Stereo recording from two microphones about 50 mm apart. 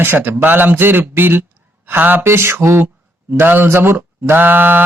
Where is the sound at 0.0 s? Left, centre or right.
Right.